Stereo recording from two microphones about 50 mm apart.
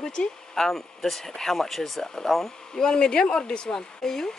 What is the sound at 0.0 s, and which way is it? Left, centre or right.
Speech, centre.